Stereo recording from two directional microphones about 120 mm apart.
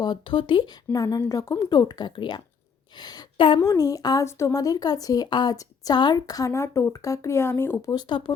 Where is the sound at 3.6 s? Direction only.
30° left (ahead or behind).